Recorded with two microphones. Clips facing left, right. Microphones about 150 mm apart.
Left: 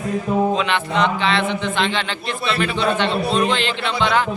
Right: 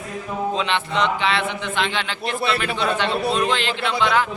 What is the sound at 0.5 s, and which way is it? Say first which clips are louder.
Mantra: left 3 dB; 25° right (ahead or behind).